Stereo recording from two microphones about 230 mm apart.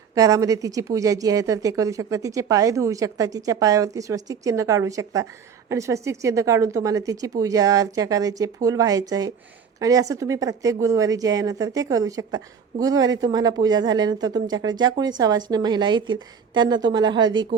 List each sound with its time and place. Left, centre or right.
0.1 s speech: centre